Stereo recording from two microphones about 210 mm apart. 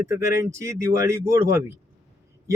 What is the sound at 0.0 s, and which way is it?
Speech, 15° right (ahead or behind).